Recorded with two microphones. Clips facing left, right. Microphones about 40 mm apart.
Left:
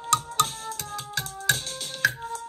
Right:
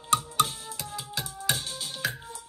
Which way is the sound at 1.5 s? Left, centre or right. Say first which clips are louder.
Left 5 dB; left.